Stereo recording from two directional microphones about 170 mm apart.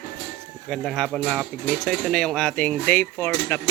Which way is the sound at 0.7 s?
5° left (ahead or behind).